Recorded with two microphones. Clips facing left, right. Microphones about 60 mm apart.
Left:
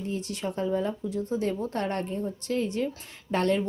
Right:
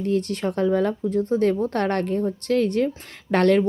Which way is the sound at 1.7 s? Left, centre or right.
Right.